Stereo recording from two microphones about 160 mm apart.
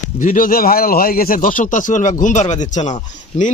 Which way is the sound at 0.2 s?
55° left (ahead or behind).